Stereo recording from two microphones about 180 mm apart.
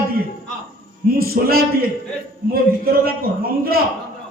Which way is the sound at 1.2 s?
55° right (ahead or behind).